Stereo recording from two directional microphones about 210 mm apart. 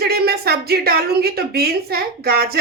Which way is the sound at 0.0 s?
50° right (ahead or behind).